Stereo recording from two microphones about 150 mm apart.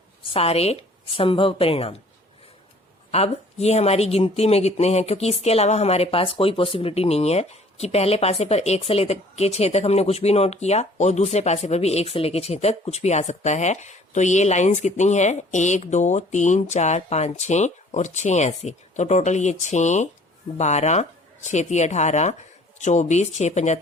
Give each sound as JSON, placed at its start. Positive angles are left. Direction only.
{"t": 0.2, "sound": "a woman's voice", "side_deg": 40}
{"t": 3.1, "sound": "speech", "side_deg": 45}